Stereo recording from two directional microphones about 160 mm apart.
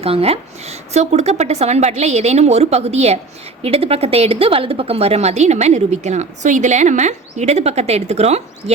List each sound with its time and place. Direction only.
0.0 s speech: 40° right (ahead or behind)